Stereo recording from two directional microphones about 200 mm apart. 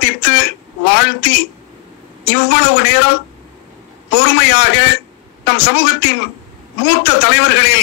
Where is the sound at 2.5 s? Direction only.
55° left (ahead or behind).